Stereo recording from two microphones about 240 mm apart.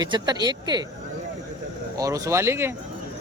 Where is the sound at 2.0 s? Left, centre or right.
Centre.